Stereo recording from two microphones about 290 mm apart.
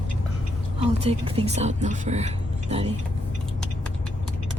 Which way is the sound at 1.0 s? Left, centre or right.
Centre.